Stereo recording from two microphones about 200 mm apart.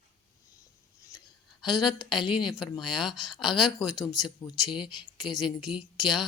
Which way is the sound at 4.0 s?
20° left (ahead or behind).